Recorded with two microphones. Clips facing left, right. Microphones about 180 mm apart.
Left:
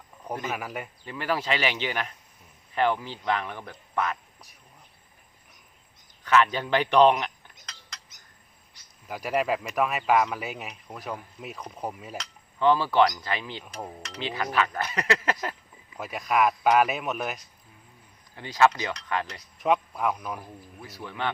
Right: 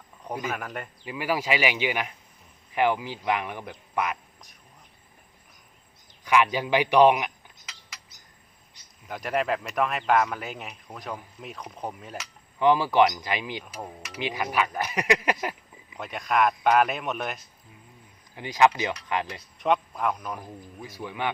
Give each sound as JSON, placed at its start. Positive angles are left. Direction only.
{"t": 0.5, "sound": "speech", "side_deg": 5}
{"t": 1.0, "sound": "speech", "side_deg": -10}
{"t": 6.2, "sound": "a sound", "side_deg": -10}
{"t": 9.0, "sound": "speech", "side_deg": 5}
{"t": 12.1, "sound": "speech", "side_deg": -10}
{"t": 16.0, "sound": "speech", "side_deg": 5}
{"t": 18.3, "sound": "speech", "side_deg": -15}
{"t": 19.5, "sound": "a man's voice", "side_deg": 0}
{"t": 20.7, "sound": "speech", "side_deg": -15}